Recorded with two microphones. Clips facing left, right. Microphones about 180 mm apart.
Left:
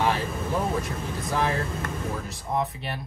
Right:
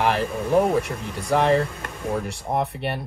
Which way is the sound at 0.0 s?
65° right (ahead or behind).